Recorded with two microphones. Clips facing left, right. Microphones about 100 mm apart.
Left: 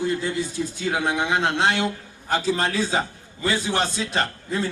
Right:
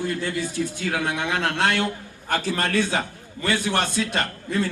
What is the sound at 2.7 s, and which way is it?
Speech, 60° right (ahead or behind).